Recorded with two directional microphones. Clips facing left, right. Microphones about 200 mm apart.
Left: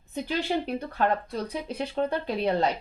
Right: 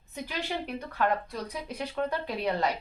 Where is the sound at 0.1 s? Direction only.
30° left (ahead or behind).